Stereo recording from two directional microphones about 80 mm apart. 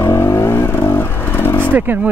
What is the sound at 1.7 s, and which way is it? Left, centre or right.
Speech, right.